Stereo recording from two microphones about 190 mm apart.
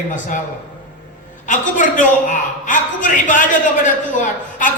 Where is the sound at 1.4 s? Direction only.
40° left (ahead or behind).